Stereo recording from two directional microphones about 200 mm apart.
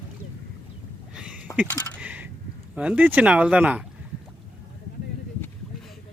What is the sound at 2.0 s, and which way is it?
Coin, 5° right (ahead or behind).